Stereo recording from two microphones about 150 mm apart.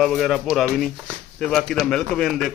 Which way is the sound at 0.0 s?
Centre (ahead or behind).